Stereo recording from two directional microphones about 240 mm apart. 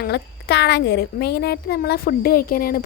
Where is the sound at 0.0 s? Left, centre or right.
Left.